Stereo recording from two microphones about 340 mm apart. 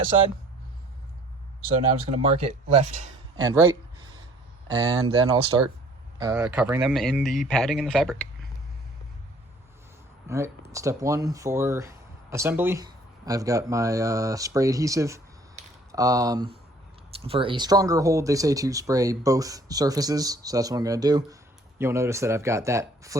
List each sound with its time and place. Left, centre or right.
2.0 s speech: centre
4.7 s speech: centre
10.2 s speech: centre